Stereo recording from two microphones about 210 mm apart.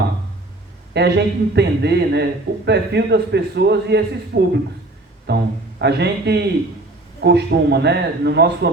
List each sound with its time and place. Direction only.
0.9 s a man's voice: 55° right (ahead or behind)